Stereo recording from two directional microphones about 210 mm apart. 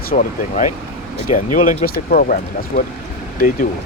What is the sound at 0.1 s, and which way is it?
Speech, 35° left (ahead or behind).